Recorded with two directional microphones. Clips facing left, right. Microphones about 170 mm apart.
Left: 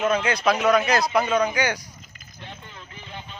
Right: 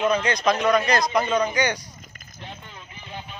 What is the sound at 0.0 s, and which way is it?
A man's voice, 5° left (ahead or behind).